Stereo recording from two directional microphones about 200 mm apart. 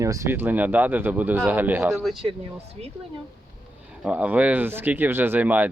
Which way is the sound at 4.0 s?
5° right (ahead or behind).